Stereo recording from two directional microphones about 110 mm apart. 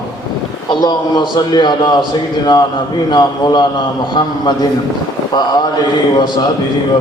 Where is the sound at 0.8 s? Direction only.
40° left (ahead or behind).